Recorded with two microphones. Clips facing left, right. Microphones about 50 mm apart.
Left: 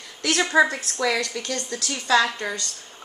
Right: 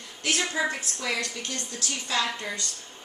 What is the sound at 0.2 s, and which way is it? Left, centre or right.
A woman's voice, left.